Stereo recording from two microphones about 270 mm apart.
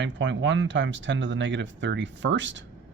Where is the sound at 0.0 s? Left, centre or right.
Right.